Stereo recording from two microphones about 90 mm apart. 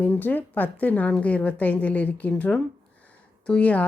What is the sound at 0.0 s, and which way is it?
A woman's voice, 20° left (ahead or behind).